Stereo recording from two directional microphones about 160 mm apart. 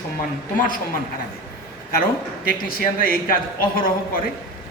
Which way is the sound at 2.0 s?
65° left (ahead or behind).